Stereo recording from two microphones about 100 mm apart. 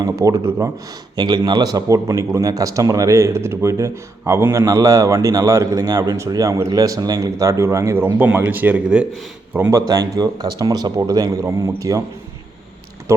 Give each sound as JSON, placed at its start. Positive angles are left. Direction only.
{"t": 0.0, "sound": "a man's voice", "side_deg": -35}
{"t": 1.1, "sound": "a man's voice", "side_deg": -45}
{"t": 7.9, "sound": "speech", "side_deg": -20}
{"t": 9.6, "sound": "a man's voice", "side_deg": -35}
{"t": 13.1, "sound": "speech", "side_deg": -30}